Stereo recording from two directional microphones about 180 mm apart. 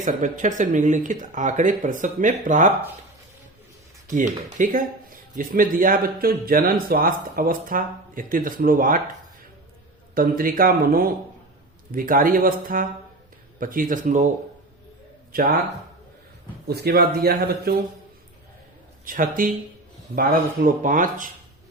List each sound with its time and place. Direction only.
0.0 s speech: 45° right (ahead or behind)
4.1 s speech: 45° right (ahead or behind)
10.2 s speech: 50° right (ahead or behind)
15.3 s speech: 55° right (ahead or behind)
16.6 s speech: 60° right (ahead or behind)
19.0 s speech: 50° right (ahead or behind)